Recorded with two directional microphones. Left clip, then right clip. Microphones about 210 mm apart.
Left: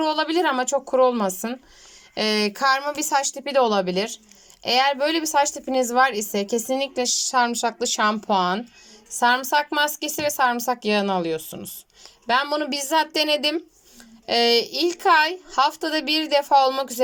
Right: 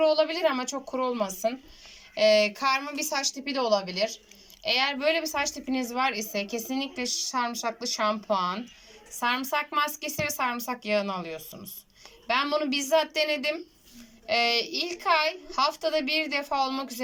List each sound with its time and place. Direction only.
0.0 s a woman's voice: 50° left (ahead or behind)